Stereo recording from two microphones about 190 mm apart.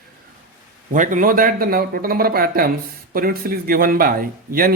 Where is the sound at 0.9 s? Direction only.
45° right (ahead or behind).